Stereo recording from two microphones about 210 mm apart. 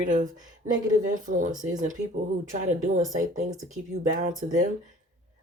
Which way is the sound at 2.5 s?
35° right (ahead or behind).